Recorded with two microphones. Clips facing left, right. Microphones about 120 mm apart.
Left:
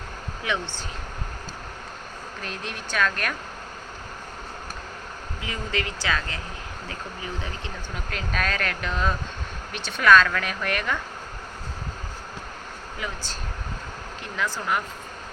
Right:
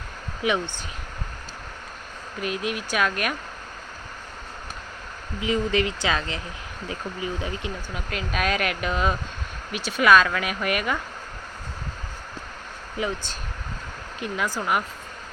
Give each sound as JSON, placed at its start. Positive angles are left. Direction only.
{"t": 0.4, "sound": "speech", "side_deg": -15}
{"t": 2.4, "sound": "speech", "side_deg": -10}
{"t": 5.4, "sound": "speech", "side_deg": -20}
{"t": 7.9, "sound": "speech", "side_deg": -5}
{"t": 14.2, "sound": "speech", "side_deg": -15}